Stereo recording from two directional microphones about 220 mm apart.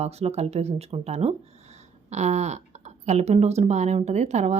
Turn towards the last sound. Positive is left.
turn(degrees=-30)  # may be behind; listen again after turning